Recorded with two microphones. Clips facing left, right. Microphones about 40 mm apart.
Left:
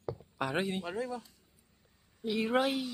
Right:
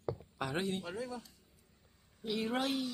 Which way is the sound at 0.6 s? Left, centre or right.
Left.